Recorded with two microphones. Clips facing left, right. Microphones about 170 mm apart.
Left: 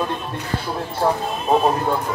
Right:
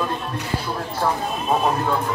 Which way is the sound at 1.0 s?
25° left (ahead or behind).